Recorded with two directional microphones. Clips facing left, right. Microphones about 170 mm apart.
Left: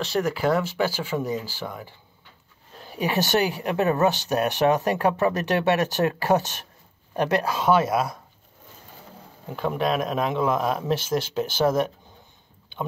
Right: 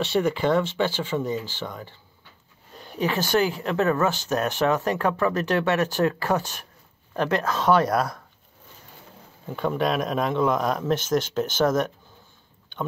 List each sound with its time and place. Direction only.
0.0 s speech: centre (ahead or behind)
2.7 s a sound: centre (ahead or behind)
3.0 s speech: 20° left (ahead or behind)
9.6 s speech: centre (ahead or behind)